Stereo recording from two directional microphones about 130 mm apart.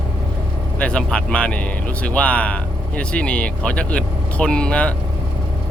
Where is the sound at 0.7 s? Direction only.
10° left (ahead or behind).